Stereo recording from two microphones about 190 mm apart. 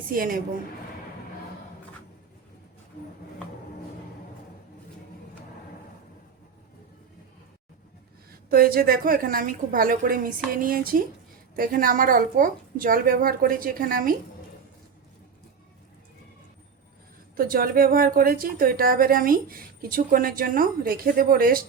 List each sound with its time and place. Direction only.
0.0 s speech: 50° right (ahead or behind)
8.3 s speech: 50° right (ahead or behind)
17.3 s speech: 50° right (ahead or behind)